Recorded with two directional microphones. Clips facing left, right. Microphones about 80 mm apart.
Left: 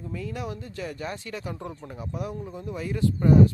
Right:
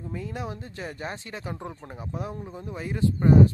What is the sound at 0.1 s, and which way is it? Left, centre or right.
Speech, right.